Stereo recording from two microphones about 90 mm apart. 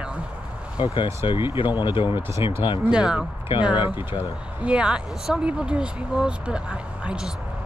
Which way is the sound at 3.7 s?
70° left (ahead or behind).